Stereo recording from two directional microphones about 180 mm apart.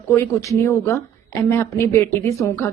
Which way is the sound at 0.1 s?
15° left (ahead or behind).